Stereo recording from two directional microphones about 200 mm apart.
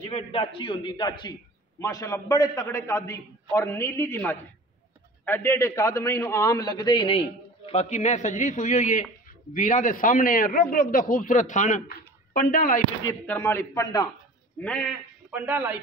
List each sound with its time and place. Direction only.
0.1 s a man's voice: 30° left (ahead or behind); by 12.8 s 45° left (ahead or behind)
13.0 s a man's voice: 10° left (ahead or behind)
15.3 s speech: 10° right (ahead or behind)